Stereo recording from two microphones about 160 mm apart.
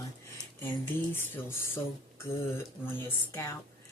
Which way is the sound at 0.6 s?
15° left (ahead or behind).